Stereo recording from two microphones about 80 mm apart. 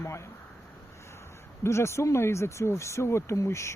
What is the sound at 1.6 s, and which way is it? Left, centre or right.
Speech, left.